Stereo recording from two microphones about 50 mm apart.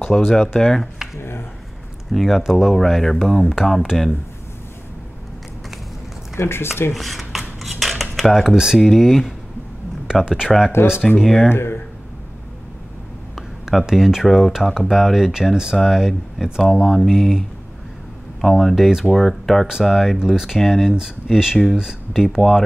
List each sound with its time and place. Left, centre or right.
0.0 s speech: centre
0.6 s speech: centre
2.1 s speech: centre
6.3 s speech: left
6.9 s a sound: centre
7.8 s cutlery: centre
8.7 s speech: centre
10.8 s speech: left
11.1 s speech: centre
11.4 s speech: left
13.7 s speech: centre
18.4 s speech: centre